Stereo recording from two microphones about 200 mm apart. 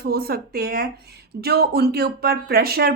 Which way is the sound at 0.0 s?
50° right (ahead or behind).